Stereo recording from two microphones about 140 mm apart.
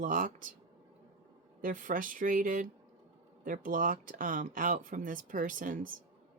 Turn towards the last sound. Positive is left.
turn(degrees=-70)  # may be behind; listen again after turning